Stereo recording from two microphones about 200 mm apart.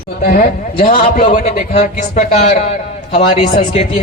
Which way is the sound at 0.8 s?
35° left (ahead or behind).